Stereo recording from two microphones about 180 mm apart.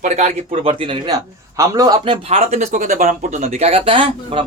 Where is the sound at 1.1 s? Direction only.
20° right (ahead or behind).